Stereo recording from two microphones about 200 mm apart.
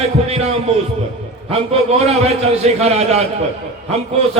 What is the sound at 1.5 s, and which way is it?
A man's voice, 30° right (ahead or behind).